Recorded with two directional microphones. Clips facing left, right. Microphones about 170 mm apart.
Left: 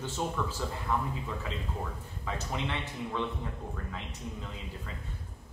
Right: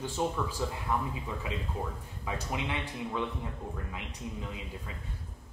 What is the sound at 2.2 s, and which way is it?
Speech, 10° right (ahead or behind).